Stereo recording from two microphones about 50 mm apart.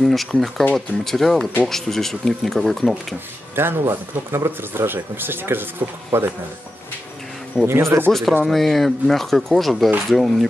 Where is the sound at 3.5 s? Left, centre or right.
Right.